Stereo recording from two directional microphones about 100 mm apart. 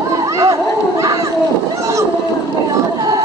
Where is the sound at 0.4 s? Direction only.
30° right (ahead or behind).